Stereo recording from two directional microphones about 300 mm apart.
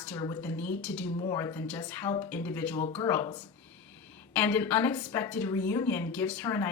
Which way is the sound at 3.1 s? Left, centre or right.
Centre.